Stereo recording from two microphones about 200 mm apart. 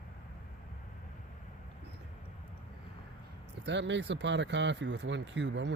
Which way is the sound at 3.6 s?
60° right (ahead or behind).